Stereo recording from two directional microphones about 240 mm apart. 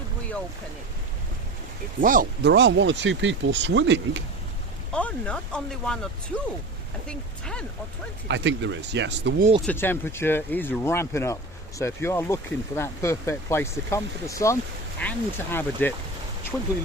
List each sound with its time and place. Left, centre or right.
2.0 s speech: right
4.9 s speech: centre
8.3 s speech: right
9.6 s speech: centre